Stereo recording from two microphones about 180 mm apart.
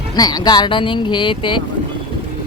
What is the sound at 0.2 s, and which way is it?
Speech, 25° left (ahead or behind).